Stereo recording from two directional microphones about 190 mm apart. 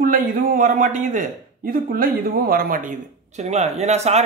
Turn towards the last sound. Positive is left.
turn(degrees=-35)  # may be behind; listen again after turning